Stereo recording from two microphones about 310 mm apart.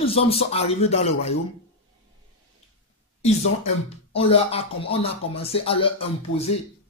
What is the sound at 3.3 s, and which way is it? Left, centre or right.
Speech, centre.